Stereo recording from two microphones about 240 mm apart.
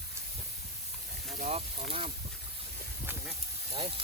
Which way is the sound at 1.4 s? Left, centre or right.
Right.